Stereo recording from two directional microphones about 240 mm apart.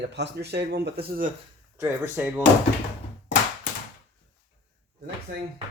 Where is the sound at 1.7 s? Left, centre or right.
Centre.